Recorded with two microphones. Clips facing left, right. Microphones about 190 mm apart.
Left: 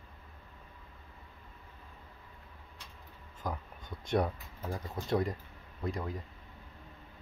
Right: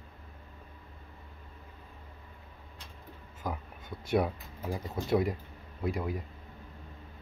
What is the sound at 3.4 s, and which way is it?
Speech, 5° right (ahead or behind).